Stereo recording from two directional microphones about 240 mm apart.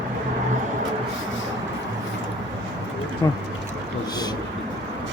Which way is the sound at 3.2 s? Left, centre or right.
Centre.